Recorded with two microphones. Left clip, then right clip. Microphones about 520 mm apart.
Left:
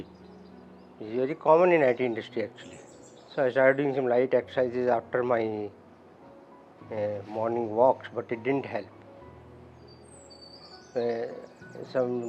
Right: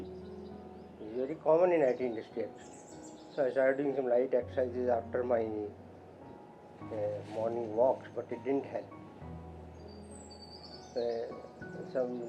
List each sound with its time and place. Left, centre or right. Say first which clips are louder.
1.1 s speech: left 7 dB; left
7.0 s speech: left 5 dB; left
10.9 s speech: left 5 dB; left